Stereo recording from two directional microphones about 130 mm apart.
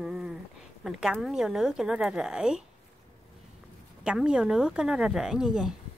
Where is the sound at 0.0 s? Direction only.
5° right (ahead or behind).